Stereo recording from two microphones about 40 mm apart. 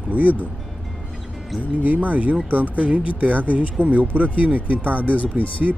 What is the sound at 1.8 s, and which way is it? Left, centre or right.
Speech, right.